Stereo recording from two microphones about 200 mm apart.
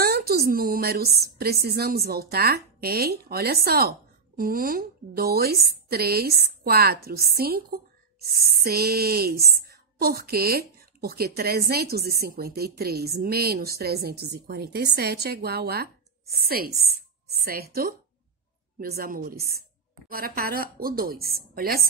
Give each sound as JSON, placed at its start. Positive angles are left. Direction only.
{"t": 0.0, "sound": "a woman's voice", "side_deg": -50}